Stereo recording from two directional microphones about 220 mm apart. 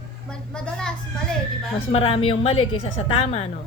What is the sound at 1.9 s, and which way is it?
A woman's voice, 25° left (ahead or behind).